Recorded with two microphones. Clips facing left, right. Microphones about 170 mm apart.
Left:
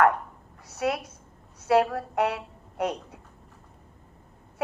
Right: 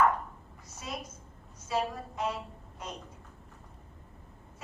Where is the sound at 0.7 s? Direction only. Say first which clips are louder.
Left 12 dB; 70° left (ahead or behind).